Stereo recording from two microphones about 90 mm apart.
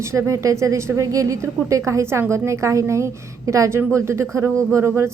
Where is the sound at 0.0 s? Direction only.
30° right (ahead or behind).